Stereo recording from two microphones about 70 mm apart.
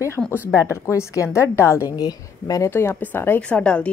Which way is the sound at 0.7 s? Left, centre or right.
Left.